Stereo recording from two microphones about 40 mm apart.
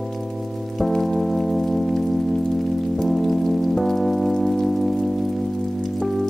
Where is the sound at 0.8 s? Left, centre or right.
Centre.